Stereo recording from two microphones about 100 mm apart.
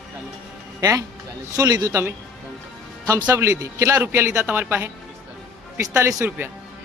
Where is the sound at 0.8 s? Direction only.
40° right (ahead or behind).